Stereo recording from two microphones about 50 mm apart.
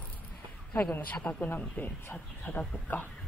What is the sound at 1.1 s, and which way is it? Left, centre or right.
Speech, left.